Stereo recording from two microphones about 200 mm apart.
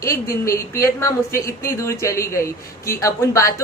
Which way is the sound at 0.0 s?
15° left (ahead or behind).